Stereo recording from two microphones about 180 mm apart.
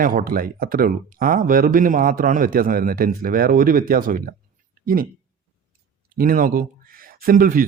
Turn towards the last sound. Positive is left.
turn(degrees=-50)  # may be behind; listen again after turning